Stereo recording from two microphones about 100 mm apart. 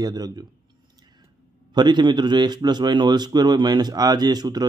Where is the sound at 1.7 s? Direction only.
45° right (ahead or behind).